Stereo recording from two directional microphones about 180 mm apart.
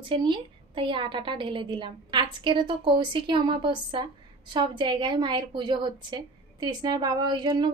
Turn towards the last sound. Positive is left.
turn(degrees=-25)  # may be behind; listen again after turning